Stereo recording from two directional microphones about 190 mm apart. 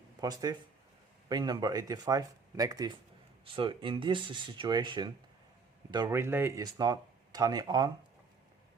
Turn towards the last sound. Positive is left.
turn(degrees=-20)  # may be behind; listen again after turning